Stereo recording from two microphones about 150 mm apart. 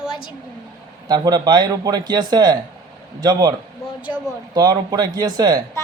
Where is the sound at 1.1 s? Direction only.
25° right (ahead or behind).